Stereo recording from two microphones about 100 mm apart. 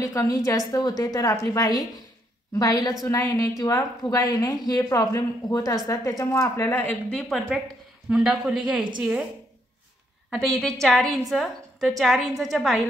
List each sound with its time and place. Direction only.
0.0 s a woman's voice: 35° left (ahead or behind)
7.1 s a woman's voice: centre (ahead or behind)
10.3 s a woman's voice: 5° left (ahead or behind)